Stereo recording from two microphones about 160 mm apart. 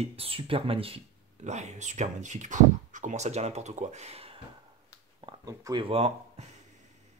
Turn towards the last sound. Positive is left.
turn(degrees=-40)  # may be behind; listen again after turning